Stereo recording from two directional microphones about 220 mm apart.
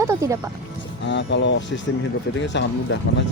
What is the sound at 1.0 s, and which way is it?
Speech, 55° left (ahead or behind).